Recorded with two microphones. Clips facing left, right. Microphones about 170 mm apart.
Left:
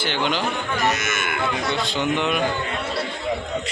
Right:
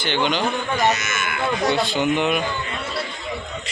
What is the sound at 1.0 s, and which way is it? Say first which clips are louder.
Speech: left 1 dB; 55° left (ahead or behind).